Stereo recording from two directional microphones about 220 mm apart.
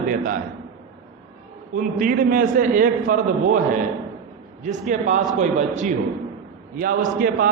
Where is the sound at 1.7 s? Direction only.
40° right (ahead or behind).